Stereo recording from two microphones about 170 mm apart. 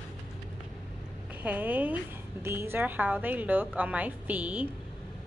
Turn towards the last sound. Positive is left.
turn(degrees=-10)  # may be behind; listen again after turning